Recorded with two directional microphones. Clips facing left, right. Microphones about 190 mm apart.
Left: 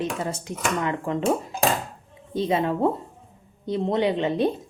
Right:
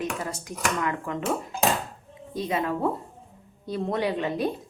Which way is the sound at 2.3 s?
30° left (ahead or behind).